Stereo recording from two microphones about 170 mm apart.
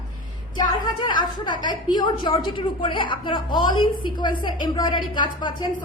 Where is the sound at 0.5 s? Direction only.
25° left (ahead or behind).